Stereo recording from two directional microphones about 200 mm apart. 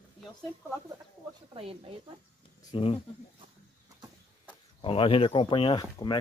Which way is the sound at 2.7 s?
25° left (ahead or behind).